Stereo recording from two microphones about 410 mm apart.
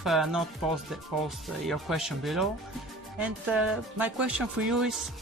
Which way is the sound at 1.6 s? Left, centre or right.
Centre.